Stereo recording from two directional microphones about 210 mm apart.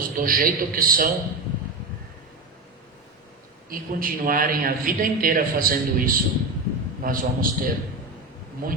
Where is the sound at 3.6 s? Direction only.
45° right (ahead or behind).